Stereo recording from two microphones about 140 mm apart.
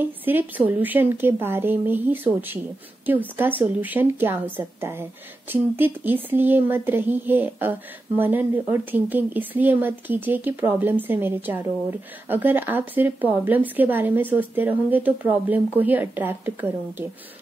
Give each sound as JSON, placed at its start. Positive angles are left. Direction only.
{"t": 0.0, "sound": "speech", "side_deg": -15}